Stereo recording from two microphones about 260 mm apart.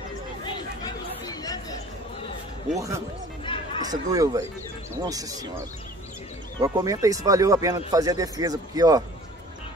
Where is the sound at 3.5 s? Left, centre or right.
Centre.